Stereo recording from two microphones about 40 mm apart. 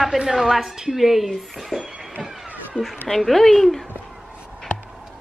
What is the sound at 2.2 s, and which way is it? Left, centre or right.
Vehicle, centre.